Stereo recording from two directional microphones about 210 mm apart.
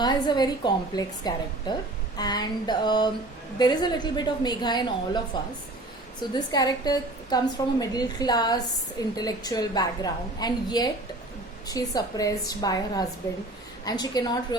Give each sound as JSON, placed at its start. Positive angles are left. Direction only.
{"t": 0.0, "sound": "a woman's voice", "side_deg": 20}
{"t": 6.3, "sound": "a woman's voice", "side_deg": 20}